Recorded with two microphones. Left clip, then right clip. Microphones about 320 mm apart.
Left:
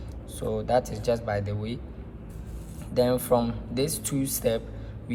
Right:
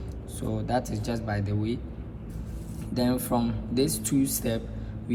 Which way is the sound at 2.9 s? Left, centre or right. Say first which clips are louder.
Left 5 dB; left.